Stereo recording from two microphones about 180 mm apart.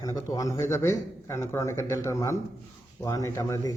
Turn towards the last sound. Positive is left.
turn(degrees=15)  # may be behind; listen again after turning